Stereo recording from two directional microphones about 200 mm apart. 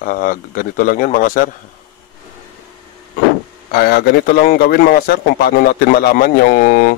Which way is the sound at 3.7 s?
50° left (ahead or behind).